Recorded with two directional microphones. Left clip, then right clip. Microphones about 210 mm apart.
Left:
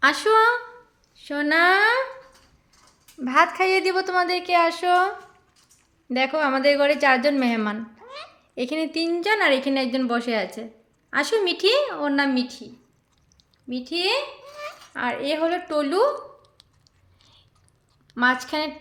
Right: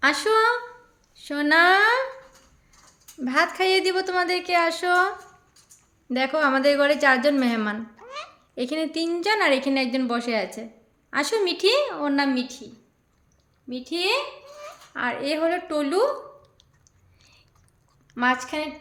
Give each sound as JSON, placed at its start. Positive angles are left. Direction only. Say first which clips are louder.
{"t": 0.0, "sound": "a woman's voice", "louder": "left 2 dB", "side_deg": 10}
{"t": 3.2, "sound": "a woman's voice", "louder": "left 3 dB", "side_deg": 5}
{"t": 13.7, "sound": "a woman's voice", "louder": "left 1 dB", "side_deg": 5}
{"t": 18.1, "sound": "a woman's voice", "louder": "left 2 dB", "side_deg": 15}